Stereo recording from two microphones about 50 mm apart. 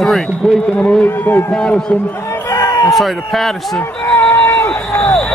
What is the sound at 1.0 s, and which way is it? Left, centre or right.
Speech, left.